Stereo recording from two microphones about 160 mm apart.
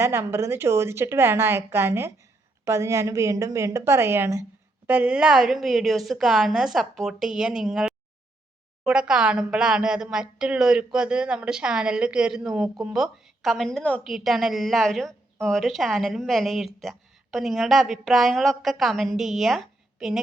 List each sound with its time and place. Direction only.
0.0 s a woman's voice: 15° right (ahead or behind)